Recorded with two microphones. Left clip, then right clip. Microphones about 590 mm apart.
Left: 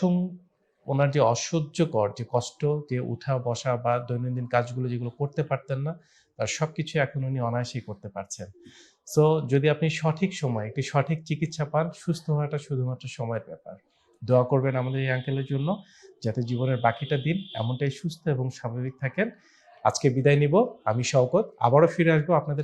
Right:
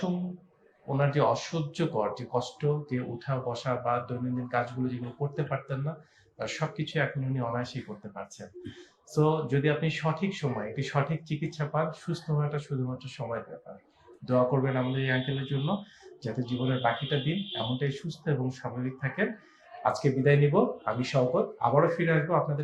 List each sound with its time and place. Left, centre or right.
0.9 s speech: left